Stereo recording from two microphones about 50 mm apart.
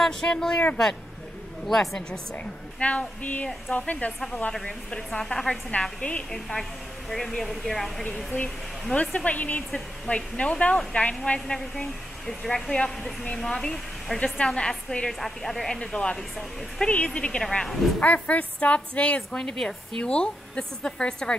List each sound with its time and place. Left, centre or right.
0.0 s a woman's voice: centre
1.7 s a woman's voice: centre
2.3 s a woman's voice: left
4.6 s a woman's voice: centre
5.7 s a woman's voice: left
7.1 s a woman's voice: centre
8.9 s a woman's voice: left
11.3 s a woman's voice: centre
14.2 s a woman's voice: left
16.9 s a woman's voice: left
17.4 s a woman's voice: centre
18.0 s a woman's voice: left